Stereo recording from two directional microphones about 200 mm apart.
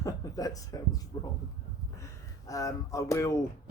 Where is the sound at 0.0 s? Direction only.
15° left (ahead or behind).